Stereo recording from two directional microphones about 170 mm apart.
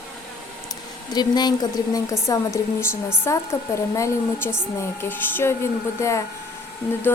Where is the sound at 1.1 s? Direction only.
25° left (ahead or behind).